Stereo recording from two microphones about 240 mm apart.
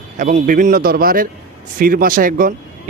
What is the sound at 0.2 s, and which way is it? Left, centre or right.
Speech, right.